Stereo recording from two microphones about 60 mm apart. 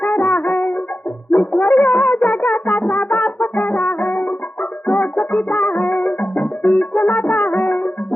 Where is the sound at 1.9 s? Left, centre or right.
Left.